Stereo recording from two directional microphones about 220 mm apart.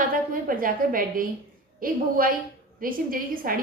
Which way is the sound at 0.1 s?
40° right (ahead or behind).